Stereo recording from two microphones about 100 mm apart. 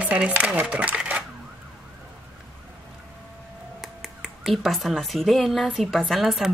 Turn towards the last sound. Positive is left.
turn(degrees=0)  # may be behind; listen again after turning